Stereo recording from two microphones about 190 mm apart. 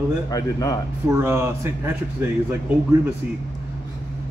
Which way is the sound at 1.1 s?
15° right (ahead or behind).